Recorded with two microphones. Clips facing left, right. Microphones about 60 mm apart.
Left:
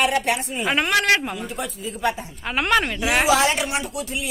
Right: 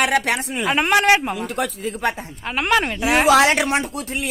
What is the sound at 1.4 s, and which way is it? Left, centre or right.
Speech, right.